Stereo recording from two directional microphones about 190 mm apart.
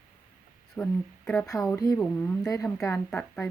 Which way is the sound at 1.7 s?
15° left (ahead or behind).